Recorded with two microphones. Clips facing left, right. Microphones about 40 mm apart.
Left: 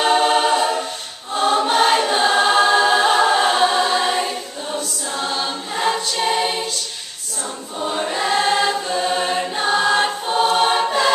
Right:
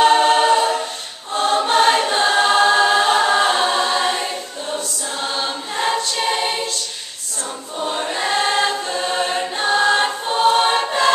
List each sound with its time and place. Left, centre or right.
0.0 s choir: centre
7.8 s choir: centre